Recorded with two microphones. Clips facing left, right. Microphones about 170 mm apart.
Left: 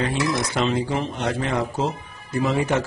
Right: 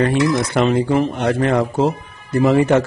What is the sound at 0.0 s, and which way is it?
A man's voice, 55° right (ahead or behind).